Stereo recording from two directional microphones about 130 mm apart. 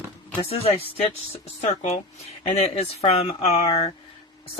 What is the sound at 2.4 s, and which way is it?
Speech, 50° left (ahead or behind).